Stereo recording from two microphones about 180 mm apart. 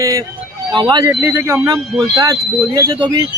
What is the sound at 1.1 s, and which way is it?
Speech, 10° right (ahead or behind).